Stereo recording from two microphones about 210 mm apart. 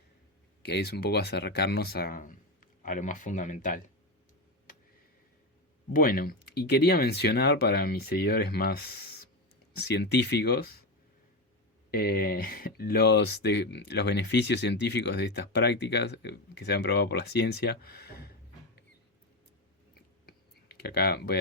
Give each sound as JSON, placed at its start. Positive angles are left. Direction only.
{"t": 0.6, "sound": "speech", "side_deg": 50}
{"t": 5.9, "sound": "speech", "side_deg": 45}
{"t": 11.9, "sound": "speech", "side_deg": 45}
{"t": 20.8, "sound": "speech", "side_deg": 50}